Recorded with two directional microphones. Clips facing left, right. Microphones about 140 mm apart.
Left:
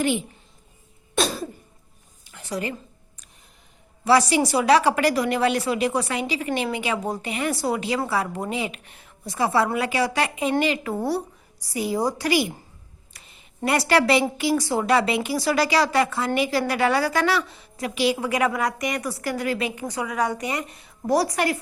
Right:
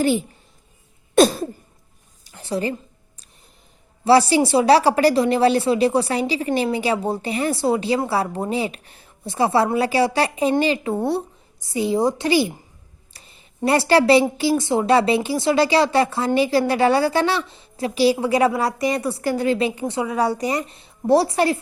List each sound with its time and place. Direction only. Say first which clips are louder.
0.0 s speech: right 4 dB; 35° right (ahead or behind)
1.1 s throat clearing: right 10 dB; 55° right (ahead or behind)
2.2 s a sound: right 5 dB; 30° right (ahead or behind)
4.0 s a woman's voice: right 4 dB; 30° right (ahead or behind)
13.1 s a sound: right 2 dB; 35° right (ahead or behind)
13.7 s a woman's voice: right 4 dB; 30° right (ahead or behind)